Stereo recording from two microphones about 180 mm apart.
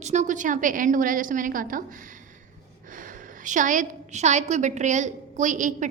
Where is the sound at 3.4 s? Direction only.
45° right (ahead or behind).